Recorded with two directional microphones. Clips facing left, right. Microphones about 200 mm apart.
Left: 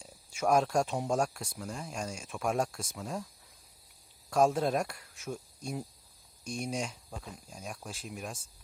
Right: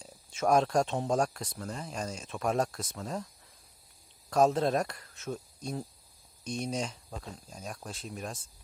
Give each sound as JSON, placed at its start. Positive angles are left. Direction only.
{"t": 0.0, "sound": "speech", "side_deg": 10}
{"t": 4.4, "sound": "speech", "side_deg": 5}
{"t": 6.6, "sound": "speech", "side_deg": 0}